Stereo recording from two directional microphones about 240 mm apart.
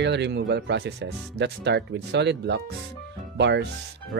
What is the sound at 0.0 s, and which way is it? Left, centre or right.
Speech, right.